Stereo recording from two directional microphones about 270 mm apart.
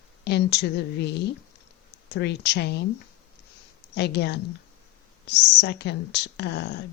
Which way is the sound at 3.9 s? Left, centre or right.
Left.